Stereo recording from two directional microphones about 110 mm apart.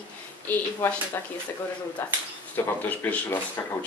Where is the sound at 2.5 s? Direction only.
15° left (ahead or behind).